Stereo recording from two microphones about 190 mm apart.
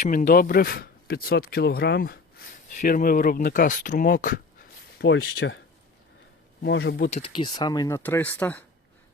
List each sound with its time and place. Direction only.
0.0 s speech: 40° left (ahead or behind)
4.9 s speech: 85° left
6.6 s speech: 65° left (ahead or behind)
7.1 s speech: 25° left (ahead or behind); by 8.6 s 10° left (ahead or behind)